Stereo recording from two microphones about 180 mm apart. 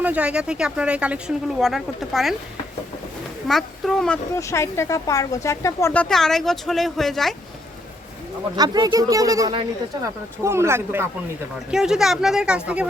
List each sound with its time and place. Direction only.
0.0 s speech: 5° right (ahead or behind)
3.4 s speech: centre (ahead or behind)
4.4 s speech: 15° left (ahead or behind)
8.5 s speech: 20° right (ahead or behind)
11.7 s speech: 5° right (ahead or behind)